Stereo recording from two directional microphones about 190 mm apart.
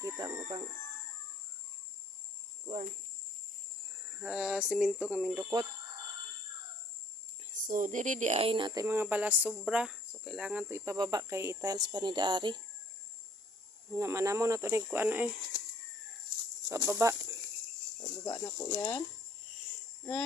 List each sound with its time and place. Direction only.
0.0 s speech: 15° right (ahead or behind)
0.3 s speech: 30° right (ahead or behind)
2.6 s cricket: 40° right (ahead or behind)
4.1 s speech: 5° right (ahead or behind)
7.5 s speech: 40° right (ahead or behind); by 12.6 s 25° right (ahead or behind)
13.9 s speech: 15° right (ahead or behind)
16.6 s speech: 15° right (ahead or behind)
18.3 s speech: 15° left (ahead or behind)